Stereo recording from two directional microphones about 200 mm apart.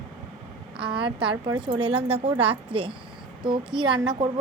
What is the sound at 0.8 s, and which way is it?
A woman's voice, 25° right (ahead or behind).